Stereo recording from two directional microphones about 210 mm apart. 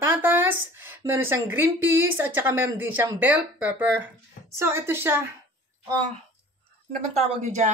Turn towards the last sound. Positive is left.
turn(degrees=-35)  # may be behind; listen again after turning